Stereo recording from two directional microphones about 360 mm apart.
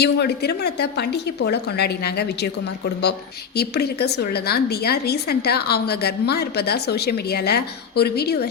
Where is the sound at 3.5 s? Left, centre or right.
Left.